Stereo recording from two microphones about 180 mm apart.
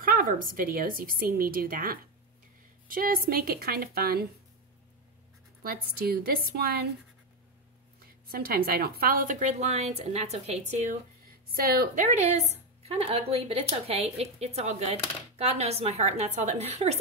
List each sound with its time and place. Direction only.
0.0 s a woman's voice: 50° right (ahead or behind)
5.6 s a woman's voice: 60° right (ahead or behind)
8.0 s speech: 55° right (ahead or behind); by 10.6 s 35° right (ahead or behind)
11.5 s speech: 55° right (ahead or behind); by 17.0 s 35° right (ahead or behind)